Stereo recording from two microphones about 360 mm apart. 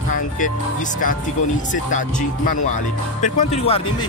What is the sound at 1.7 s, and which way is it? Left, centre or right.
Speech, left.